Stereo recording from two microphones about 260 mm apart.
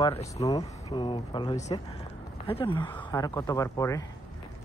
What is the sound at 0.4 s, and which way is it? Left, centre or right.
Speech, centre.